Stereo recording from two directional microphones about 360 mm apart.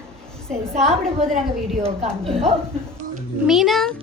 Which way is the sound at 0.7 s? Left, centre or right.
Centre.